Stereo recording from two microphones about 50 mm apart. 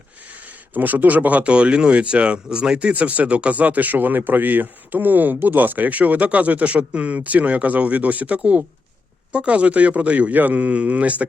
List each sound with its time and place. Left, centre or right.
0.4 s speech: right; by 2.9 s centre
2.9 s speech: right